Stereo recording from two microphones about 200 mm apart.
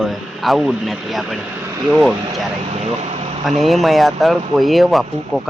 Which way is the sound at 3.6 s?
Centre (ahead or behind).